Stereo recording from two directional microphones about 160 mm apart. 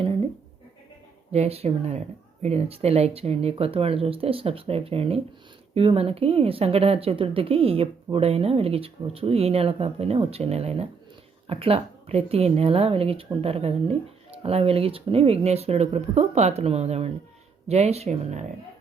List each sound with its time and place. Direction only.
1.3 s speech: 40° right (ahead or behind)